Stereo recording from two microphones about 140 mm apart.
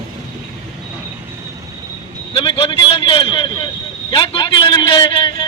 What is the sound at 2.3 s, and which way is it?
A man's voice, 35° left (ahead or behind).